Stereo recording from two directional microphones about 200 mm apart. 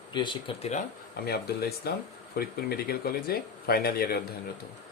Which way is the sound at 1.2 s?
50° left (ahead or behind).